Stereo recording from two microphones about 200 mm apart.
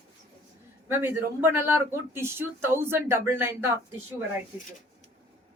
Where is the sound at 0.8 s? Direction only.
10° right (ahead or behind).